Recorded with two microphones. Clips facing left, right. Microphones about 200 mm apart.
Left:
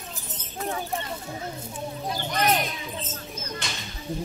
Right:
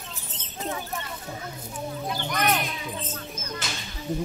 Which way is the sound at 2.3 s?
30° left (ahead or behind).